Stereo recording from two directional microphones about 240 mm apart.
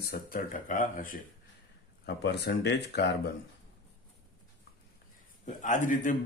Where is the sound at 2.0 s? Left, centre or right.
Left.